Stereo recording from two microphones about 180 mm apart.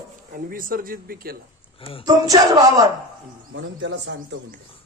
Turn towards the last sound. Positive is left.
turn(degrees=-90)